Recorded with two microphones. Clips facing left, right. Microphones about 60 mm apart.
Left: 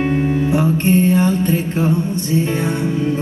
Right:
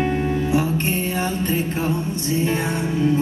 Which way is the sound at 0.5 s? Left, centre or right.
Left.